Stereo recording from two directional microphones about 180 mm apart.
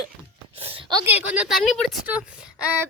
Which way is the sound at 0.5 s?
30° right (ahead or behind).